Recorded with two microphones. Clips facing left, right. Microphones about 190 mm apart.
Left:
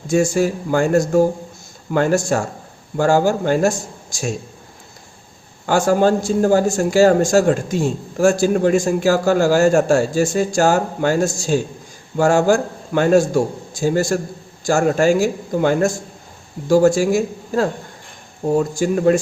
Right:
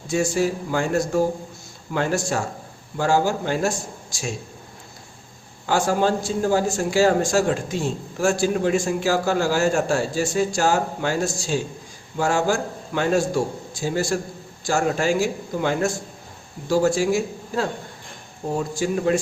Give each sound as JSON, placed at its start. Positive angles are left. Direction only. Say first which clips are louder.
{"t": 0.1, "sound": "a man's voice", "louder": "left 5 dB", "side_deg": 45}
{"t": 5.6, "sound": "a man's voice", "louder": "left 5 dB", "side_deg": 45}